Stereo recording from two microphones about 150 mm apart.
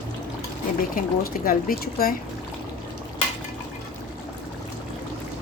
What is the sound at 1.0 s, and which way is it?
Speech, 70° left (ahead or behind).